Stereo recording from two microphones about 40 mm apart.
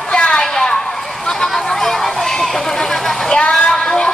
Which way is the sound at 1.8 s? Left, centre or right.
Centre.